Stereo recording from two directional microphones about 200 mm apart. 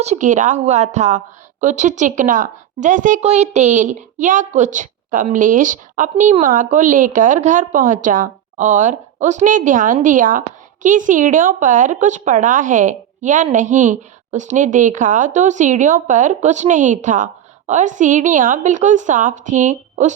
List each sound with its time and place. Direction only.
0.0 s a woman's voice: 35° right (ahead or behind)